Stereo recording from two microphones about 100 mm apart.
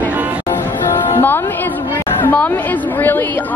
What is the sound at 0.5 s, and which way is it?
Music, 25° left (ahead or behind).